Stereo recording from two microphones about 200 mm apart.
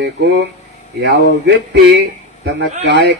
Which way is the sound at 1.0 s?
60° right (ahead or behind).